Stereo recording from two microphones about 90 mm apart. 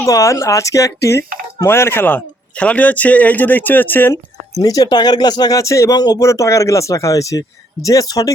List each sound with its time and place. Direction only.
0.0 s speech: 35° left (ahead or behind)
4.6 s speech: 45° left (ahead or behind)